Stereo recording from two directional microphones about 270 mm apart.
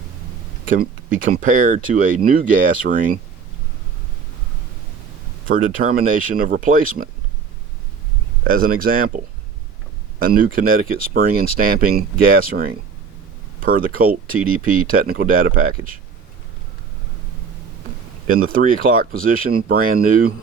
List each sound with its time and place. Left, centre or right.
0.7 s speech: right
5.5 s speech: right
8.4 s speech: right
18.3 s speech: right